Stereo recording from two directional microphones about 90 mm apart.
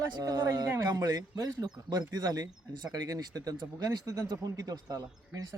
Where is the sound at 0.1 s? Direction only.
45° right (ahead or behind).